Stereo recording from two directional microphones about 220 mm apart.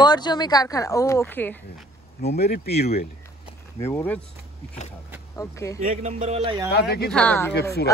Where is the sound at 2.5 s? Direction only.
45° left (ahead or behind).